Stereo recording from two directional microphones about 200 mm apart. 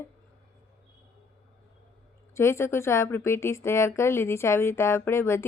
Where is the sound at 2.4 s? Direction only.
15° left (ahead or behind).